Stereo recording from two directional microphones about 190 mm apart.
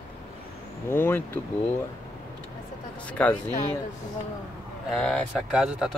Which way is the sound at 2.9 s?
5° left (ahead or behind).